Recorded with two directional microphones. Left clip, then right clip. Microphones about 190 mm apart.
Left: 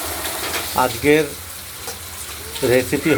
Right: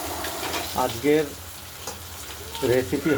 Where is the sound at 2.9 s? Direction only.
20° left (ahead or behind).